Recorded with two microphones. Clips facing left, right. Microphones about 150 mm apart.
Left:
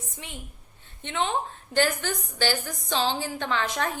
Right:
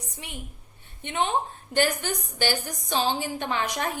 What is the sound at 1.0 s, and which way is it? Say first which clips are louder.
A woman's voice: right 1 dB; 15° right (ahead or behind).